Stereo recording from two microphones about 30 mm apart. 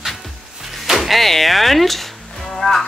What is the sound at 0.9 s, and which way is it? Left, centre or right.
Speech, centre.